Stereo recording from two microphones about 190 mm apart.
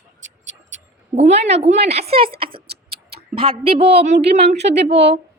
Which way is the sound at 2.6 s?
55° right (ahead or behind).